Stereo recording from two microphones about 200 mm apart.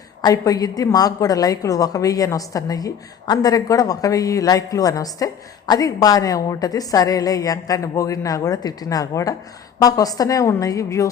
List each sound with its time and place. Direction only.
0.2 s a woman's voice: 20° left (ahead or behind)